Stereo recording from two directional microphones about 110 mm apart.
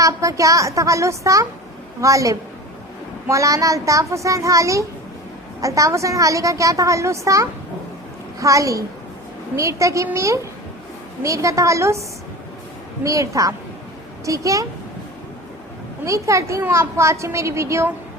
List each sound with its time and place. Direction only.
0.0 s a woman's voice: 30° right (ahead or behind)
13.0 s a woman's voice: 30° right (ahead or behind)
16.0 s a woman's voice: 30° right (ahead or behind)